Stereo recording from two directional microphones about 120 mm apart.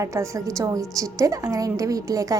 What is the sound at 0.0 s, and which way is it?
A woman's voice, 25° right (ahead or behind).